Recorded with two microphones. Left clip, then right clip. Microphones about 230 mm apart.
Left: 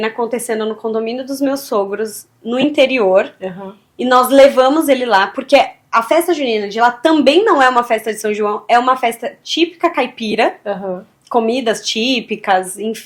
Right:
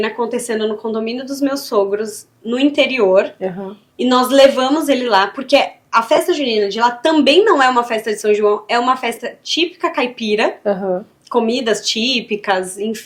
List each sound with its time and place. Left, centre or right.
0.0 s a woman's voice: left
10.6 s speech: right
11.3 s a woman's voice: left